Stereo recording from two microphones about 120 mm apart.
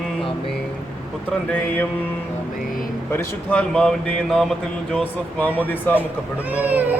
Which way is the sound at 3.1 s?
20° left (ahead or behind).